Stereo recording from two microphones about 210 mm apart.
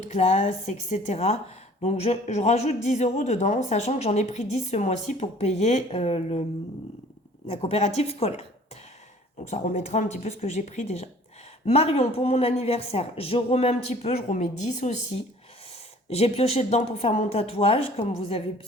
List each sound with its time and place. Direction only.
0.0 s a man's voice: 35° left (ahead or behind)
7.4 s speech: 30° left (ahead or behind)
9.5 s a man's voice: 35° left (ahead or behind)